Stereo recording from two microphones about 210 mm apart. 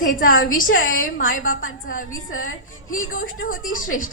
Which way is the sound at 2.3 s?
75° left (ahead or behind).